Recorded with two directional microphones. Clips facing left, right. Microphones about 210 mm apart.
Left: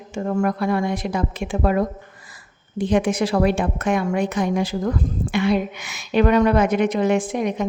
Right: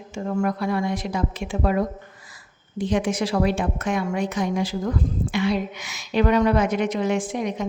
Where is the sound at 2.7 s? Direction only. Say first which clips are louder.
Left 3 dB; 55° left (ahead or behind).